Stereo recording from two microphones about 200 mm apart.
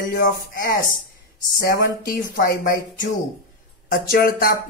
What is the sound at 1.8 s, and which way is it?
Speech, 45° left (ahead or behind).